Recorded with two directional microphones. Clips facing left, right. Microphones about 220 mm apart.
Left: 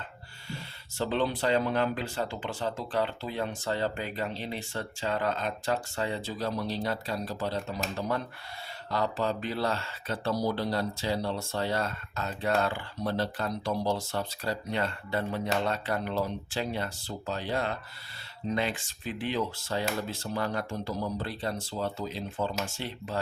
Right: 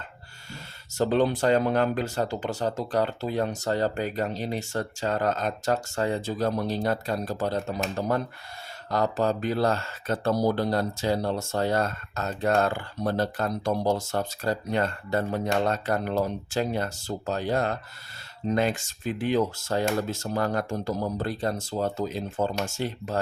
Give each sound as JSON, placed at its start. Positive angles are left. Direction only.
{"t": 0.5, "sound": "speech", "side_deg": -45}